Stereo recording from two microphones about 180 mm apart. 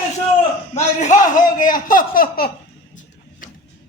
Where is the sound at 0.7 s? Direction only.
40° left (ahead or behind).